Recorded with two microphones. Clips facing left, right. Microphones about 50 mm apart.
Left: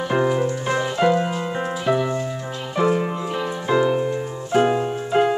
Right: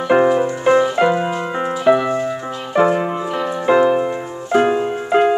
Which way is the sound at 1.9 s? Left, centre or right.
Right.